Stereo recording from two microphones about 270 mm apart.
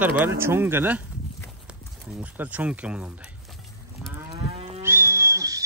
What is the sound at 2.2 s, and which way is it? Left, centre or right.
Speech, centre.